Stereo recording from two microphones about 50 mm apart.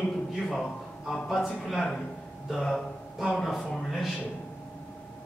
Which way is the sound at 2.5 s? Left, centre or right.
Centre.